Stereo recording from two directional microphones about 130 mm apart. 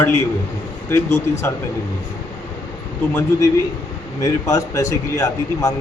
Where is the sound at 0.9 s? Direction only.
20° left (ahead or behind).